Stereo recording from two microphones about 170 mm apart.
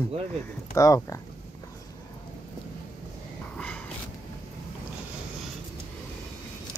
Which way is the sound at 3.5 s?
10° left (ahead or behind).